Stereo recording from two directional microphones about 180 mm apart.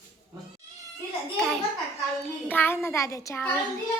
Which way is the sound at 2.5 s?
10° left (ahead or behind).